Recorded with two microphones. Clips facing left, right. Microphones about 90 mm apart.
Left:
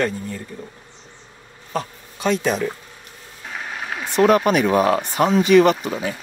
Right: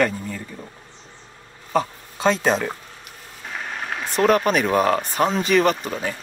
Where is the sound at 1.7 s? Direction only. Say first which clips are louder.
Right 5 dB; 25° right (ahead or behind).